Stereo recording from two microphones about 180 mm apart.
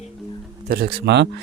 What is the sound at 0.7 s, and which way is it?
Speech, 60° right (ahead or behind).